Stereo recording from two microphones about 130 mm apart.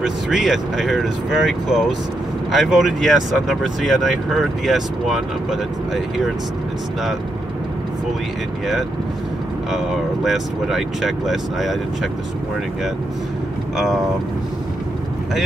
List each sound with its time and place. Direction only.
0.0 s speech: 5° right (ahead or behind)
10.2 s speech: centre (ahead or behind)